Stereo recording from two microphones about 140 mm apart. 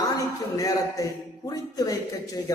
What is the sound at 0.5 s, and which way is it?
A man's voice, 25° left (ahead or behind).